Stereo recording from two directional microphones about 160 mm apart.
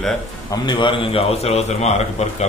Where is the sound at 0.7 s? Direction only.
30° left (ahead or behind).